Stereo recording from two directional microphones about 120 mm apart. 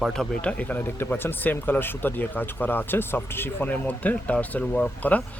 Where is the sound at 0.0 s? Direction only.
5° left (ahead or behind).